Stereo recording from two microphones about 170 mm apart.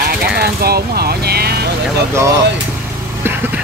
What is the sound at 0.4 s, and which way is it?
Vehicle, 65° right (ahead or behind).